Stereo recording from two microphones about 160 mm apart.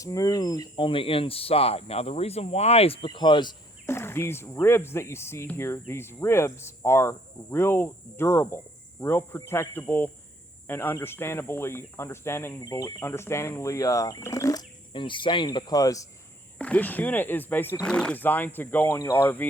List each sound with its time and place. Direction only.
0.0 s speech: 20° left (ahead or behind)
3.8 s cricket: 15° left (ahead or behind)
10.7 s speech: 15° left (ahead or behind)
16.6 s cricket: 10° left (ahead or behind)